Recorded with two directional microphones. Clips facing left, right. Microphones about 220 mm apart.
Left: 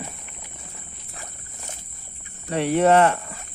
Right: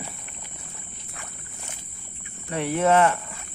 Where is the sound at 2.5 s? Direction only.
35° left (ahead or behind).